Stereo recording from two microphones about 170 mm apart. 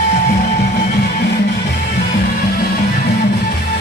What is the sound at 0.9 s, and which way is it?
Music, 70° left (ahead or behind).